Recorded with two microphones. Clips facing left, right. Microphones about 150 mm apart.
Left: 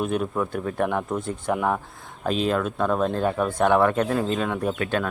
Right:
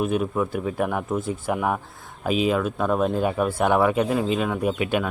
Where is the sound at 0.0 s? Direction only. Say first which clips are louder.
Right 2 dB; 5° right (ahead or behind).